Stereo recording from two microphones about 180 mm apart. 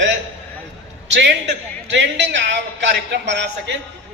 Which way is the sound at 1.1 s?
70° right (ahead or behind).